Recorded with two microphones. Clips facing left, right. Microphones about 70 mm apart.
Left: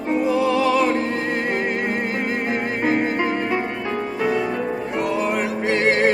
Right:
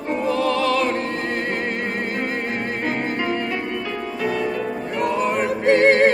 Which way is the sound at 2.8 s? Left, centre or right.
Centre.